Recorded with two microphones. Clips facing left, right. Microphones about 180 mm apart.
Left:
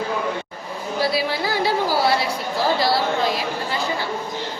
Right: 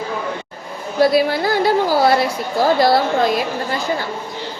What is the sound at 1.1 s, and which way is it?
Music, 50° right (ahead or behind).